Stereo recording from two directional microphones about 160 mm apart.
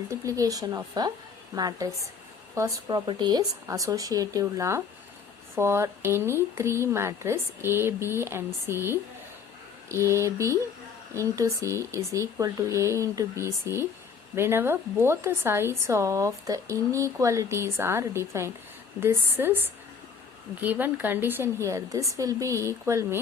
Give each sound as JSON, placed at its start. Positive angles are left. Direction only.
{"t": 0.1, "sound": "speech", "side_deg": -20}
{"t": 20.6, "sound": "speech", "side_deg": -10}